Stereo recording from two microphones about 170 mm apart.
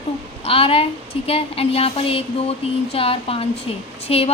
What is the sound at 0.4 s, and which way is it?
A woman's voice, 35° left (ahead or behind).